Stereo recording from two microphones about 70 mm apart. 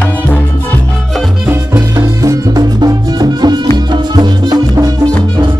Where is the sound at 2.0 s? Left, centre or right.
Right.